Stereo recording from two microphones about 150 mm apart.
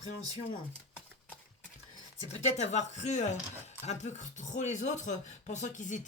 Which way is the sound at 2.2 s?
50° left (ahead or behind).